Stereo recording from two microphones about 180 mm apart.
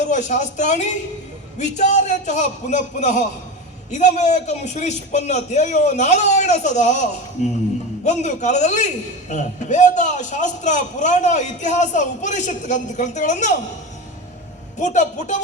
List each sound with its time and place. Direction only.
0.0 s a man's voice: 40° left (ahead or behind)
14.8 s a man's voice: 45° left (ahead or behind)